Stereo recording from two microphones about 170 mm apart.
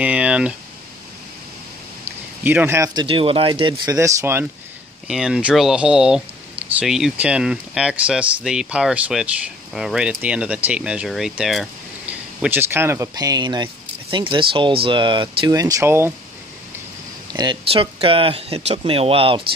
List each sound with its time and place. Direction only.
0.0 s speech: 5° right (ahead or behind)
2.4 s speech: 10° right (ahead or behind)
5.0 s speech: 5° right (ahead or behind)
17.3 s speech: 25° right (ahead or behind)